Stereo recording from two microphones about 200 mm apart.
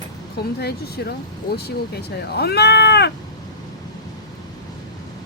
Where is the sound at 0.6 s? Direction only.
55° left (ahead or behind).